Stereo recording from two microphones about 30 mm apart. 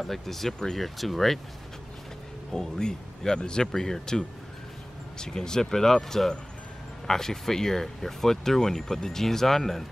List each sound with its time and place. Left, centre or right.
0.0 s speech: centre
2.5 s speech: left